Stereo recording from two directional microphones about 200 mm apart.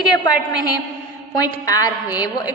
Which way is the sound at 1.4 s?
20° left (ahead or behind).